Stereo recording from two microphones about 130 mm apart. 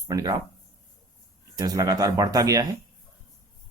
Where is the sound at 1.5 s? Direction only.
30° right (ahead or behind).